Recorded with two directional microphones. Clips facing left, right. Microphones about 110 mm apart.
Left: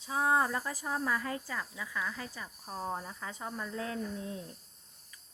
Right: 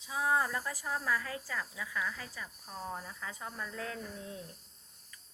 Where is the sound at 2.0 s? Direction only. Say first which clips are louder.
Left 1 dB; 25° left (ahead or behind).